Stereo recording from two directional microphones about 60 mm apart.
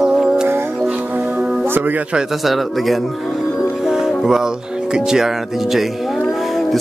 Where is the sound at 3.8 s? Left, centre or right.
Centre.